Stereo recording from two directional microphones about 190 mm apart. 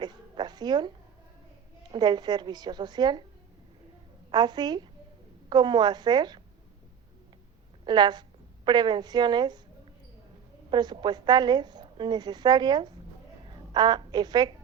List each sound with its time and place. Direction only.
0.0 s cat: 20° right (ahead or behind)
1.9 s a woman's voice: 20° right (ahead or behind)
4.3 s a woman's voice: 20° right (ahead or behind)
7.9 s a woman's voice: 20° right (ahead or behind)
10.7 s a woman's voice: 20° right (ahead or behind)